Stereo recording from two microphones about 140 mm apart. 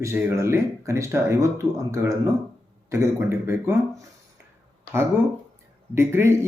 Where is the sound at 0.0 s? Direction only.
20° right (ahead or behind).